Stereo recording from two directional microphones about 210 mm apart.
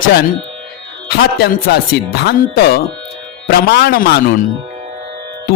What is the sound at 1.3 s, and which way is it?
Music, 50° left (ahead or behind).